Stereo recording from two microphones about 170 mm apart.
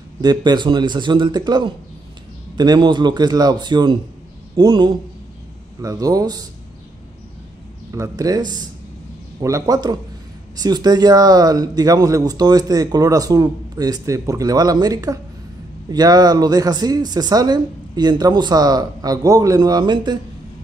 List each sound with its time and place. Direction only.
0.2 s speech: 25° right (ahead or behind)
7.9 s speech: 20° right (ahead or behind)